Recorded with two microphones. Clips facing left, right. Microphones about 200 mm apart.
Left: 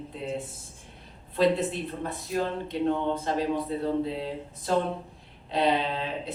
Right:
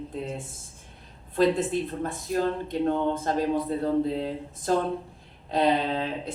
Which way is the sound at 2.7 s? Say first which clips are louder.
Right 1 dB; 50° right (ahead or behind).